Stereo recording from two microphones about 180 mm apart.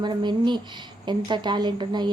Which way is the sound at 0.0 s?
25° right (ahead or behind).